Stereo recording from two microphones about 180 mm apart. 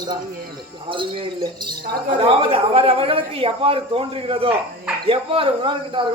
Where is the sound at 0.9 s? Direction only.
30° right (ahead or behind).